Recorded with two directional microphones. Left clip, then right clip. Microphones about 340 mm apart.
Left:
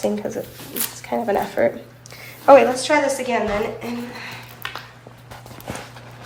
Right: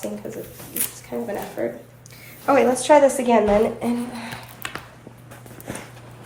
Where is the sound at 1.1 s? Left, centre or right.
Left.